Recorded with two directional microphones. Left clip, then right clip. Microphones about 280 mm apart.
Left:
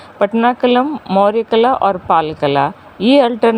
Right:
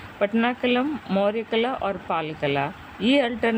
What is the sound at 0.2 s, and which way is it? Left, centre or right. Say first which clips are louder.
Speech: left 10 dB; left.